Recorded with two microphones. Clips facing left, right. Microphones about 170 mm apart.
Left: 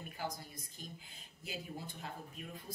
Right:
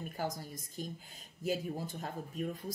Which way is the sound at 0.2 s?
45° right (ahead or behind).